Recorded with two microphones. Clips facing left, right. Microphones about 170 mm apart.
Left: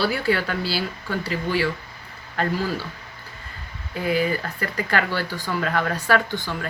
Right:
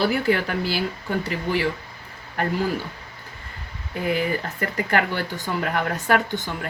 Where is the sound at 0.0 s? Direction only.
20° right (ahead or behind).